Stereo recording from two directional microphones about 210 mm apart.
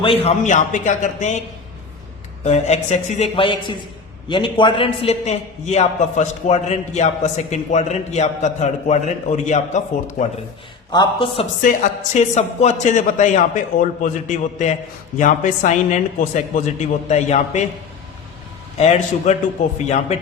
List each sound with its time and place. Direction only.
0.0 s a man's voice: 25° left (ahead or behind)
2.4 s a man's voice: 30° left (ahead or behind)
10.9 s a man's voice: 20° left (ahead or behind)
11.6 s a man's voice: 35° left (ahead or behind)
18.8 s a man's voice: 30° left (ahead or behind)